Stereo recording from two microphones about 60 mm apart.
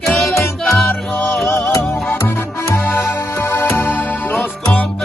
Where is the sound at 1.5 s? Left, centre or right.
Left.